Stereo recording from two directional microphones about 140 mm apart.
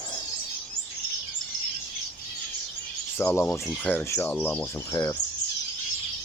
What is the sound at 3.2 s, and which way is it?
Speech, 15° left (ahead or behind).